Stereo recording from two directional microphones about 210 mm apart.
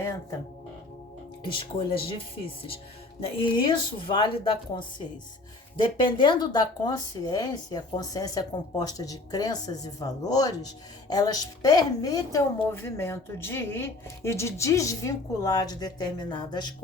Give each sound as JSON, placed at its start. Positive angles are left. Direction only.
{"t": 0.0, "sound": "music", "side_deg": 15}
{"t": 1.5, "sound": "a woman's voice", "side_deg": 25}